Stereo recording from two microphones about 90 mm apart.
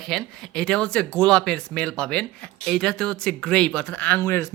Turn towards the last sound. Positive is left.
turn(degrees=35)  # may be behind; listen again after turning